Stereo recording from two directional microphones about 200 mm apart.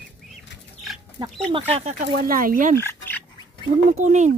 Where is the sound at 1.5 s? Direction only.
30° right (ahead or behind).